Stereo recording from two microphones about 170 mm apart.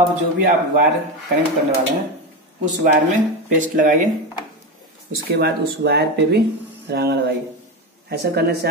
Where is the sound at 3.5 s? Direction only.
50° right (ahead or behind).